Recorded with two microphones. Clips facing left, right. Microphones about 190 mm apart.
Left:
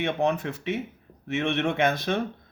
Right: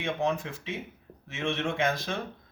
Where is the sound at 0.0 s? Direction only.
60° left (ahead or behind).